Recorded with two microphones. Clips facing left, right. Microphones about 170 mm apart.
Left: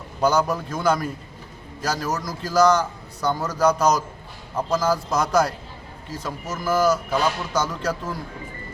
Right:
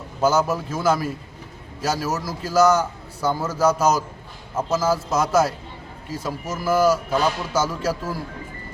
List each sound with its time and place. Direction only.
0.2 s a man's voice: 5° right (ahead or behind)